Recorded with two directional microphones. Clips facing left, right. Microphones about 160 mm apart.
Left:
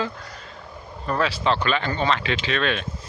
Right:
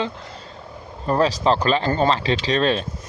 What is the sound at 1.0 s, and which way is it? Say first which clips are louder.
Speech: right 4 dB; 35° right (ahead or behind).